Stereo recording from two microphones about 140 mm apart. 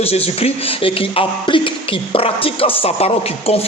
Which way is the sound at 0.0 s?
45° left (ahead or behind).